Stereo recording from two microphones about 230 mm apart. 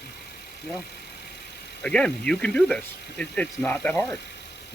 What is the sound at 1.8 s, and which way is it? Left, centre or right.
Speech, centre.